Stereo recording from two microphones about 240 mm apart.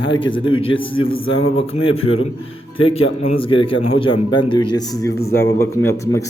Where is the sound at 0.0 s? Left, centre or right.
Centre.